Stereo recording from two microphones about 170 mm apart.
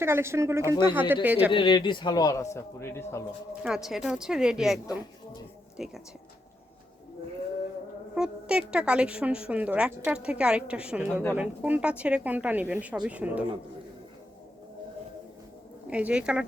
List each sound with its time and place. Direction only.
0.0 s a woman's voice: 15° right (ahead or behind)
1.5 s a man's voice: 30° left (ahead or behind)
3.8 s speech: centre (ahead or behind)
8.1 s a woman's voice: 5° right (ahead or behind)
15.9 s a woman's voice: 5° right (ahead or behind)